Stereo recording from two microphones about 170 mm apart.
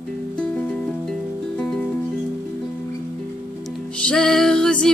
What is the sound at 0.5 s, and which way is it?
Music, 5° left (ahead or behind).